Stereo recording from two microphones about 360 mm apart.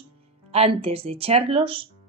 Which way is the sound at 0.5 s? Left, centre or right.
Centre.